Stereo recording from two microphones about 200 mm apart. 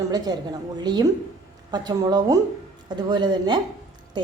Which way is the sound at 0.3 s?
20° right (ahead or behind).